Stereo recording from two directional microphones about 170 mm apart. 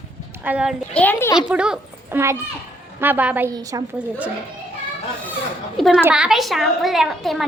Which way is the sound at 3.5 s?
20° right (ahead or behind).